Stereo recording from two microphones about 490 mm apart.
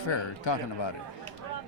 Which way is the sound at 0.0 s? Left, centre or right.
Left.